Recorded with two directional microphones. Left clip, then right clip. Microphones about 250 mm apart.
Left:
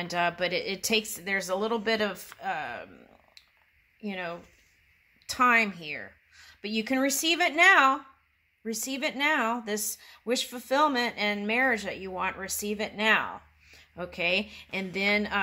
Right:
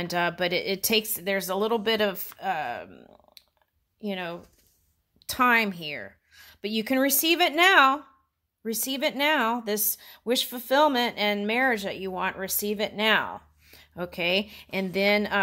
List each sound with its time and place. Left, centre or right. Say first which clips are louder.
0.0 s a woman's voice: right 2 dB; right
3.4 s a sound: left 1 dB; right
4.0 s a woman's voice: right 2 dB; right